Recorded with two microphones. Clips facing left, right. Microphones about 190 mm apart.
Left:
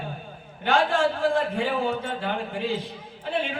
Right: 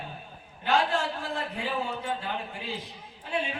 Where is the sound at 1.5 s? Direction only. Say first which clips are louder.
Left 7 dB; 80° left.